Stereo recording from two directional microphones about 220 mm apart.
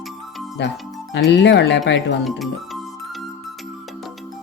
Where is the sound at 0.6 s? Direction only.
50° left (ahead or behind).